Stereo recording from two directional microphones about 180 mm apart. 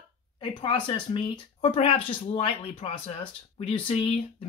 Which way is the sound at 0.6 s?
25° left (ahead or behind).